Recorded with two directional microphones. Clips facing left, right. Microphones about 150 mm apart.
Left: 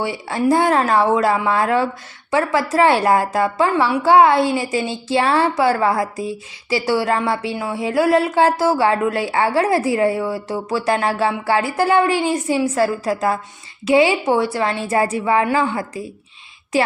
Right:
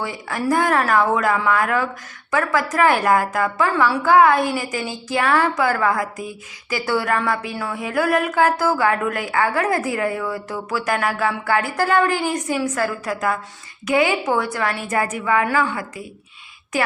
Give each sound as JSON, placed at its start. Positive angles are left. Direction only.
{"t": 0.0, "sound": "a woman's voice", "side_deg": 25}